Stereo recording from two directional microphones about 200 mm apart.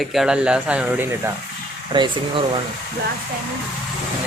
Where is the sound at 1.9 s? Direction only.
25° right (ahead or behind).